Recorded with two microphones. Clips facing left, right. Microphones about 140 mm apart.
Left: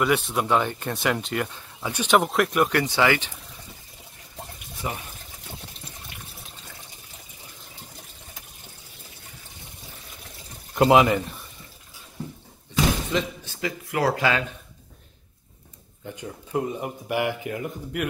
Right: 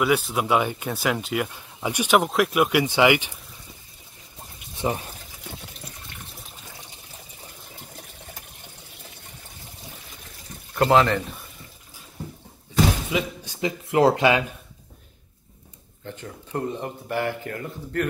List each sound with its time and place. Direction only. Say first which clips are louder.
0.0 s speech: right 1 dB; centre (ahead or behind)
4.7 s speech: right 6 dB; 30° right (ahead or behind)
10.7 s speech: left 1 dB; 15° left (ahead or behind)
13.1 s speech: even; 15° right (ahead or behind)
16.1 s speech: left 2 dB; 10° left (ahead or behind)